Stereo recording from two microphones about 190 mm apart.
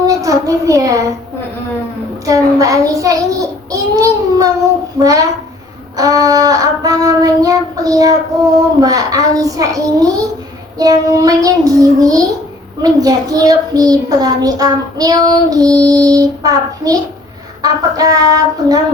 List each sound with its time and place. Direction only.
0.1 s a child's voice: 15° right (ahead or behind)
2.2 s a child's voice: 20° right (ahead or behind)